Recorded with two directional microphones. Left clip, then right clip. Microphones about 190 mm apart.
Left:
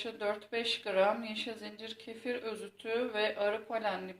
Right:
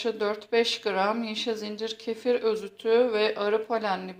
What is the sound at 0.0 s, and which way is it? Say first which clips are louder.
Speech: right 8 dB; 50° right (ahead or behind).